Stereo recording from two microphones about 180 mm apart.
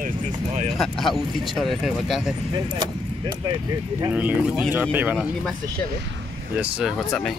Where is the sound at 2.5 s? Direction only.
25° right (ahead or behind).